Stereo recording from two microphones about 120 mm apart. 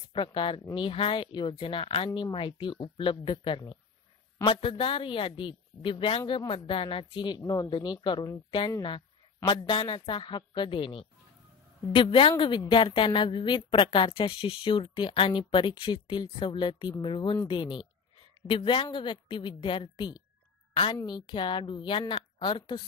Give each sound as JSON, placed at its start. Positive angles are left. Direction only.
{"t": 0.1, "sound": "a woman's voice", "side_deg": 40}